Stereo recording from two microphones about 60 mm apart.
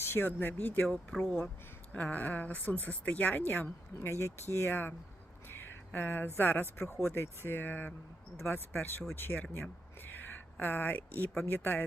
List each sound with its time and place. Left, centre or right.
0.0 s speech: left
1.1 s speech: centre; by 11.9 s left